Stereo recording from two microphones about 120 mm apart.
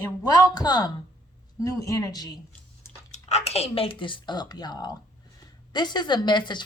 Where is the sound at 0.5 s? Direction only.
35° left (ahead or behind).